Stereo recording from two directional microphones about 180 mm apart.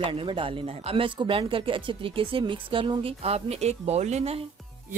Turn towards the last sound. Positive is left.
turn(degrees=-35)  # may be behind; listen again after turning